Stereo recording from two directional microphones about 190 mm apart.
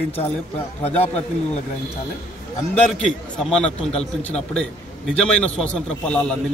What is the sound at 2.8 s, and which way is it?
Speech, 5° left (ahead or behind).